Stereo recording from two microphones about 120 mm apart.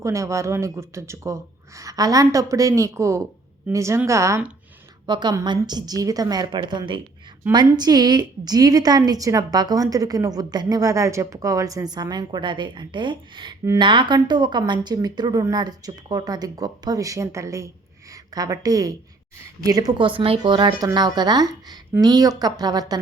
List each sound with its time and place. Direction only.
0.0 s speech: 25° right (ahead or behind)
5.0 s a woman's voice: 40° right (ahead or behind)